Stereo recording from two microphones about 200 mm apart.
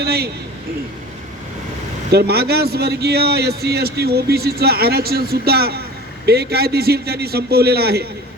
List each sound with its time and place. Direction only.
0.0 s a man's voice: 50° right (ahead or behind)
2.1 s a man's voice: 55° right (ahead or behind)